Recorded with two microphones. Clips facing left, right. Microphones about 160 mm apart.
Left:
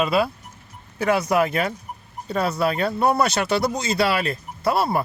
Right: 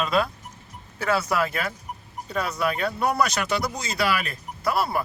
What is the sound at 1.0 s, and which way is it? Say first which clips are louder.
Speech: left 4 dB; 15° left (ahead or behind).